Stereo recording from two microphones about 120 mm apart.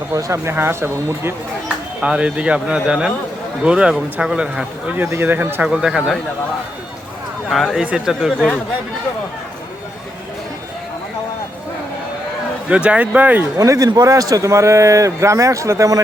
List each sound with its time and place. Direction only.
0.1 s speech: 25° right (ahead or behind)
1.6 s speech: 10° right (ahead or behind)
7.5 s speech: centre (ahead or behind)
12.6 s speech: 10° right (ahead or behind)
13.6 s speech: 30° right (ahead or behind)